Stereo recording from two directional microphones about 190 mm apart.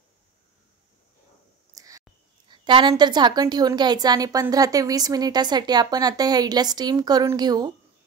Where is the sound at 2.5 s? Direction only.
25° right (ahead or behind).